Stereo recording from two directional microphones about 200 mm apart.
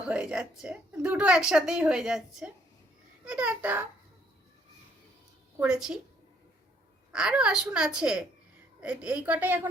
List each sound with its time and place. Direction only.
0.0 s a woman's voice: 5° right (ahead or behind)
5.5 s a woman's voice: 5° right (ahead or behind)
7.1 s a woman's voice: 5° right (ahead or behind)